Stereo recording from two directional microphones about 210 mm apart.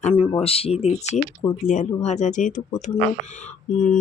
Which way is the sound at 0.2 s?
30° left (ahead or behind).